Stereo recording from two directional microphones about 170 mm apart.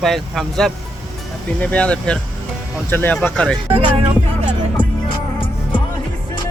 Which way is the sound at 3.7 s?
35° right (ahead or behind).